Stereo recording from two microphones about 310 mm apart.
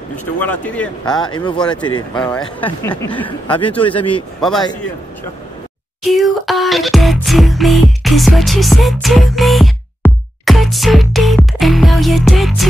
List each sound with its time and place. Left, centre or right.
0.1 s speech: centre
2.1 s speech: centre
4.4 s speech: centre
6.1 s music: centre